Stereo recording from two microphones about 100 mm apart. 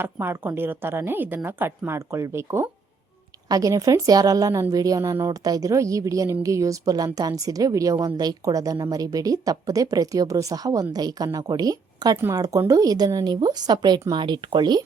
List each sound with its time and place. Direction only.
0.0 s a woman's voice: 20° right (ahead or behind); by 12.1 s 40° right (ahead or behind)
12.1 s a woman's voice: 30° right (ahead or behind); by 14.8 s 45° right (ahead or behind)